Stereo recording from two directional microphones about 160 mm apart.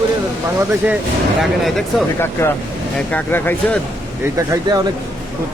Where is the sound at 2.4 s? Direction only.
15° left (ahead or behind).